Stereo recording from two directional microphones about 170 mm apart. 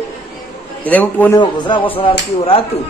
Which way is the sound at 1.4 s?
30° left (ahead or behind).